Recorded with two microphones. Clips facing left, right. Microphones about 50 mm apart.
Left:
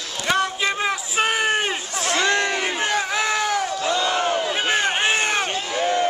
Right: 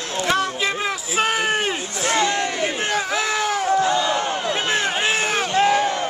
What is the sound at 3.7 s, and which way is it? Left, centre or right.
Crowd, right.